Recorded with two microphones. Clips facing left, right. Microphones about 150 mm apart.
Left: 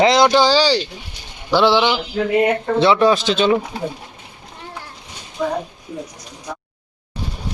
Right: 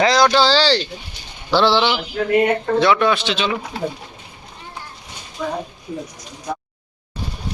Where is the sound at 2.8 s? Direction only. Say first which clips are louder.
Left 5 dB; 30° left (ahead or behind).